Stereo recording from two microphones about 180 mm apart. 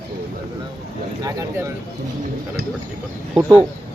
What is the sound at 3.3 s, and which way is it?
Speech, 10° right (ahead or behind).